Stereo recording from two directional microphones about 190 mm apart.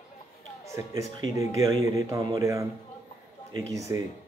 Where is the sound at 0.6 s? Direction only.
15° right (ahead or behind).